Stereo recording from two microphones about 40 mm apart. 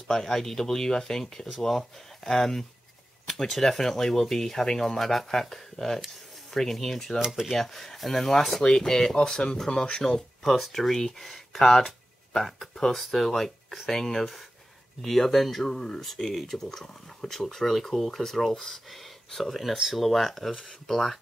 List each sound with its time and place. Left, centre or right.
0.1 s speech: centre
5.9 s a sound: centre
6.6 s speech: centre
7.2 s dishes: centre
7.5 s speech: centre
9.1 s speech: left
10.4 s speech: centre